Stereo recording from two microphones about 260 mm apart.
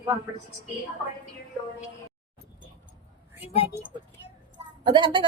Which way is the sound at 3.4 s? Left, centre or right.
Left.